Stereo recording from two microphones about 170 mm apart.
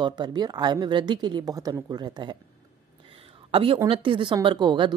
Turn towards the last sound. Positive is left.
turn(degrees=-25)  # may be behind; listen again after turning